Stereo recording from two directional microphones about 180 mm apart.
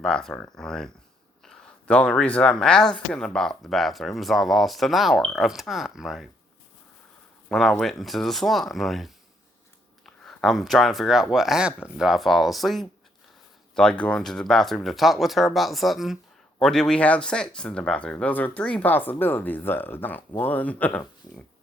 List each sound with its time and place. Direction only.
0.0 s speech: 5° left (ahead or behind)
7.5 s speech: centre (ahead or behind)
10.2 s speech: centre (ahead or behind)